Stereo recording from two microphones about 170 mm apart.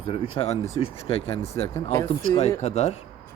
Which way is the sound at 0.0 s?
35° left (ahead or behind).